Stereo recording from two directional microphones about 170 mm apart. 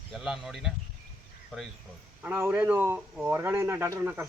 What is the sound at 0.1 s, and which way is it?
Speech, centre (ahead or behind).